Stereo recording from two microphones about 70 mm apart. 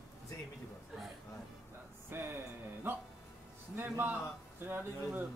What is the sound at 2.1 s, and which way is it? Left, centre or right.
Speech, right.